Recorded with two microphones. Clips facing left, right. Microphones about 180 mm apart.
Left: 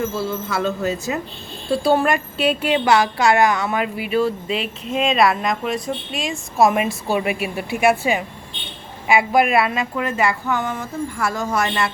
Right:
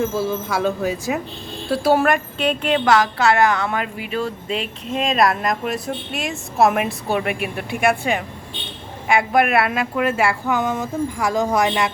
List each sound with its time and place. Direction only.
0.1 s a woman's voice: 15° right (ahead or behind); by 4.3 s 10° left (ahead or behind)
4.4 s speech: 40° right (ahead or behind)
4.9 s a woman's voice: centre (ahead or behind); by 11.7 s 15° right (ahead or behind)